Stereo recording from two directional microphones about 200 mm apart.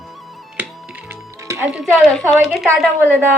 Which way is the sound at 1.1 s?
15° right (ahead or behind).